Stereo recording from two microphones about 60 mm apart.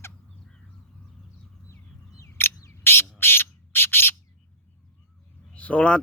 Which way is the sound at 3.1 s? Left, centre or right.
Left.